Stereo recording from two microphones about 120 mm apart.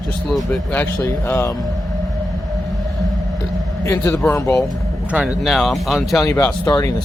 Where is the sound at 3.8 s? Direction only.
25° left (ahead or behind).